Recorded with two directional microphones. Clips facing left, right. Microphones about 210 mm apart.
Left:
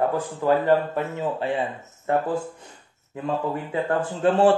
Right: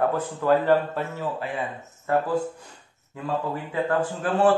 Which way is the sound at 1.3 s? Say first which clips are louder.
Left 5 dB; 30° left (ahead or behind).